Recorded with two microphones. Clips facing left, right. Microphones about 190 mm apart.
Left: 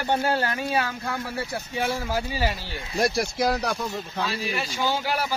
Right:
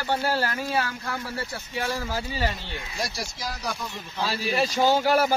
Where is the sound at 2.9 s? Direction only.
60° left (ahead or behind).